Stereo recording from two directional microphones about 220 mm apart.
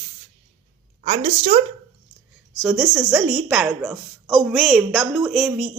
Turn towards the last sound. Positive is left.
turn(degrees=0)  # may be behind; listen again after turning